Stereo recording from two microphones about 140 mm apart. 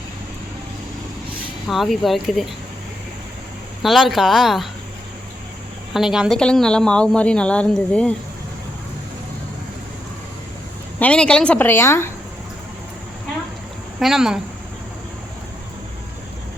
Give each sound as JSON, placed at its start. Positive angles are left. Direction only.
{"t": 1.6, "sound": "speech", "side_deg": 0}
{"t": 3.8, "sound": "speech", "side_deg": 0}
{"t": 5.9, "sound": "a woman's voice", "side_deg": -5}
{"t": 11.0, "sound": "a woman's voice", "side_deg": 5}
{"t": 14.0, "sound": "speech", "side_deg": -5}